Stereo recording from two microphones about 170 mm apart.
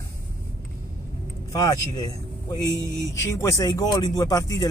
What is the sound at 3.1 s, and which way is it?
Speech, 15° left (ahead or behind).